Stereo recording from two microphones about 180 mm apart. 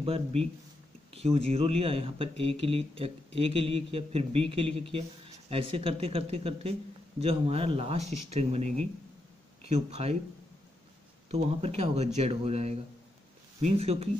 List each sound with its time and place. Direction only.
0.0 s speech: 35° right (ahead or behind)
11.2 s speech: 35° right (ahead or behind)